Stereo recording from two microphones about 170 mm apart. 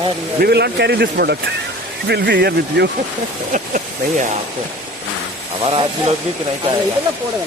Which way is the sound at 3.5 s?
50° right (ahead or behind).